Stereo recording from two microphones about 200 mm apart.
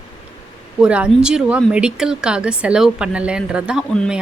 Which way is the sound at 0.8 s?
5° right (ahead or behind).